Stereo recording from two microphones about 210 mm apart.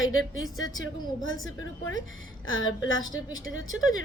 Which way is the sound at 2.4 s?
70° left (ahead or behind).